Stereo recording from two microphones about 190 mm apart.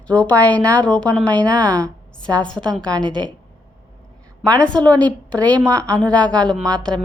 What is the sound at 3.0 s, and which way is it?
Speech, 25° right (ahead or behind).